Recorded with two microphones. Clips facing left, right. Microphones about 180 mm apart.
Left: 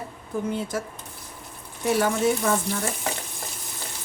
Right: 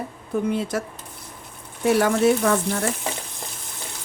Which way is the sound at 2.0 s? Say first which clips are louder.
Right 4 dB; 65° right (ahead or behind).